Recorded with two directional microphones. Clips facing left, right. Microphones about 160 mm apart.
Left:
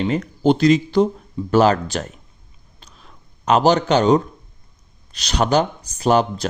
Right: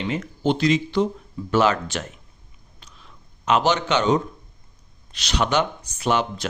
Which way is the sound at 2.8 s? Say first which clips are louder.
Left 3 dB; 40° left (ahead or behind).